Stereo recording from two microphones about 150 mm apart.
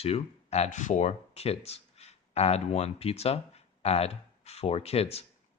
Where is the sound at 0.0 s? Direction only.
45° left (ahead or behind).